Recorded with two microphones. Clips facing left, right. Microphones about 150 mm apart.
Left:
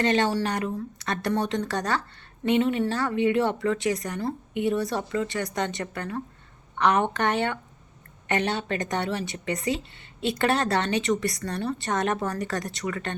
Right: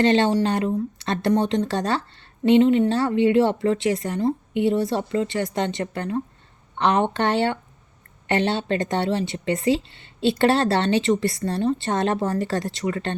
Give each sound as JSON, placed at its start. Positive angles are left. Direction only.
{"t": 0.0, "sound": "a woman's voice", "side_deg": -25}